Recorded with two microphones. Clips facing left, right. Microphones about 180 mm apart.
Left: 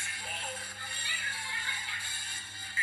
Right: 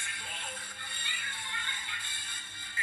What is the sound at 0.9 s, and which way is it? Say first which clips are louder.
Music: left 1 dB; 25° right (ahead or behind).